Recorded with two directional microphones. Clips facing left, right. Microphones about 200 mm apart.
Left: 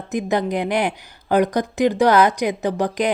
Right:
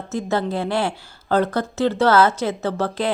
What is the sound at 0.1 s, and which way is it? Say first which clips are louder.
Speech: left 2 dB; 15° left (ahead or behind).